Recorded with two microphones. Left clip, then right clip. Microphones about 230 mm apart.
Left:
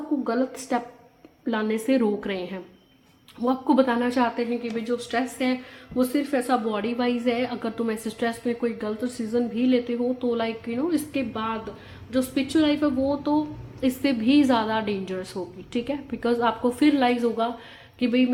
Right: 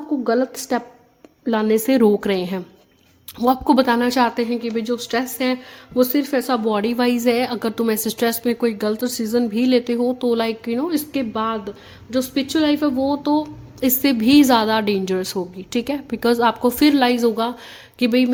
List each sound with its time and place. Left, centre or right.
0.3 s a woman's voice: right